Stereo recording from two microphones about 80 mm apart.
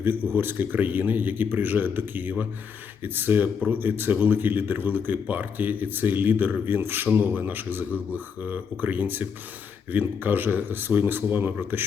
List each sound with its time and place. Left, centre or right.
0.0 s speech: right